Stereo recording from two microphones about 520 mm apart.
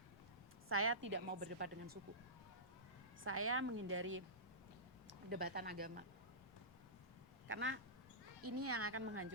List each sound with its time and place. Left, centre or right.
0.7 s a woman's voice: right
3.2 s a woman's voice: right
7.4 s a woman's voice: right